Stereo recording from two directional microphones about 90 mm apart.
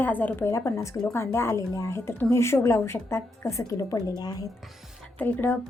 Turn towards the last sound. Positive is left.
turn(degrees=25)  # may be behind; listen again after turning